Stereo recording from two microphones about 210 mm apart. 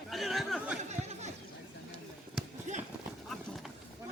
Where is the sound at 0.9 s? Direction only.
30° right (ahead or behind).